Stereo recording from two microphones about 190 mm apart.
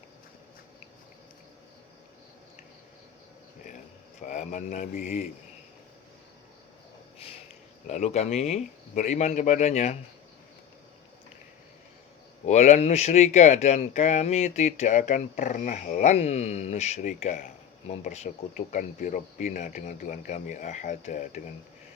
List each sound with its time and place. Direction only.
4.2 s speech: 40° left (ahead or behind)
7.2 s a sound: 30° left (ahead or behind)
7.9 s speech: 35° left (ahead or behind)
12.5 s speech: 35° left (ahead or behind)